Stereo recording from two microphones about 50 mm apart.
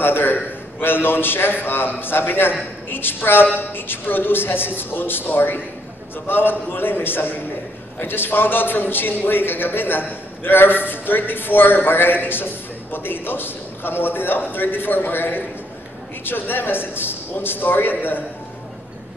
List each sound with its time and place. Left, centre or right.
0.0 s a man's voice: left